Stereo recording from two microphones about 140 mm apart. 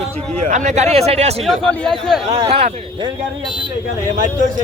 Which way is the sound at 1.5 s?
5° left (ahead or behind).